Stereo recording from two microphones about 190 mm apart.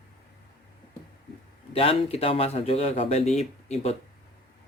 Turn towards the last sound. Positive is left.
turn(degrees=35)  # may be behind; listen again after turning